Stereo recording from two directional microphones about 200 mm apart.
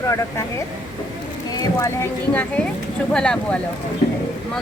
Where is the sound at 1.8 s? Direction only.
10° left (ahead or behind).